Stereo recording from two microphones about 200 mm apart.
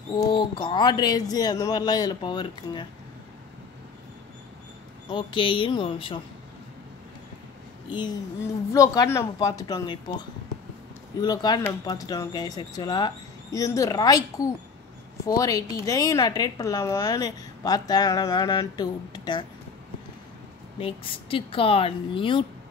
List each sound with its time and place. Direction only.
0.1 s a woman's voice: 20° left (ahead or behind)
5.1 s a woman's voice: 25° left (ahead or behind)
7.9 s a woman's voice: 20° left (ahead or behind)
20.8 s a woman's voice: 25° left (ahead or behind)